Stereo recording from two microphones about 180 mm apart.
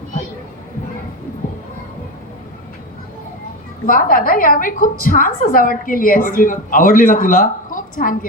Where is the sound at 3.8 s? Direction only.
50° left (ahead or behind).